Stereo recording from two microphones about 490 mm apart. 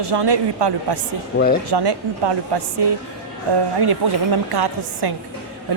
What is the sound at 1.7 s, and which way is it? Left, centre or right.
Speech, right.